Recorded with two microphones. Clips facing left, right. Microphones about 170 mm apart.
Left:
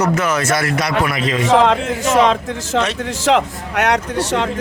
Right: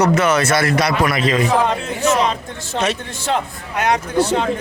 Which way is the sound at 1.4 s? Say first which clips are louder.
Left 4 dB; 85° left.